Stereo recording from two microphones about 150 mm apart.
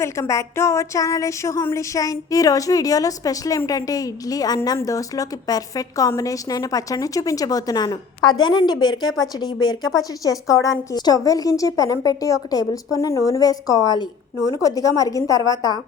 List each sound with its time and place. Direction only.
0.0 s speech: 20° left (ahead or behind)